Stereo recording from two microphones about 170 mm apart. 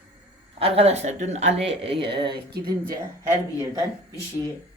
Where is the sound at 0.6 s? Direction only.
35° right (ahead or behind).